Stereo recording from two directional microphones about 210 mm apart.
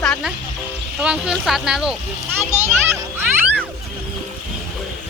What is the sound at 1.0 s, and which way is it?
Speech, 5° right (ahead or behind).